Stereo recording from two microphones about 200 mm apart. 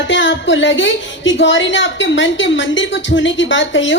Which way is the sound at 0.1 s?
65° left (ahead or behind).